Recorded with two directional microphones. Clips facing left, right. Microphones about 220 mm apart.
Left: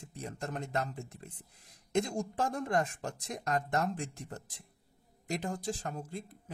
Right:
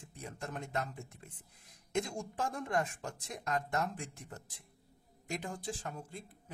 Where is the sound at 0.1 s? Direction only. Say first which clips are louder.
Left 4 dB; 40° left (ahead or behind).